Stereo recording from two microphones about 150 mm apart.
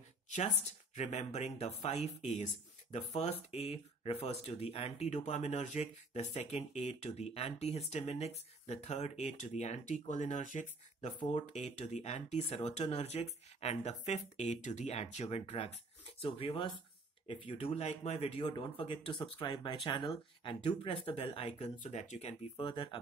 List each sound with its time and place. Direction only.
0.9 s speech: 50° left (ahead or behind)
22.6 s speech: 35° left (ahead or behind)